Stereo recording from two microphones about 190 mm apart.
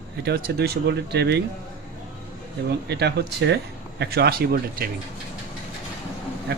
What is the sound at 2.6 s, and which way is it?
Speech, 60° right (ahead or behind).